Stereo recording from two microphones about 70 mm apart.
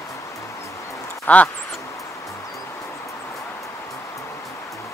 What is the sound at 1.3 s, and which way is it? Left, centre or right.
Speech, left.